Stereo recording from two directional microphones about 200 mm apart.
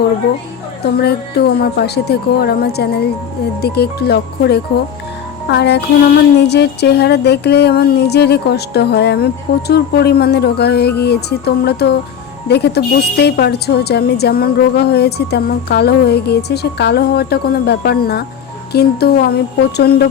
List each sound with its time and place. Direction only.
0.9 s a woman's voice: 55° left (ahead or behind)
5.5 s music: 55° left (ahead or behind)
12.5 s a woman's voice: 55° left (ahead or behind)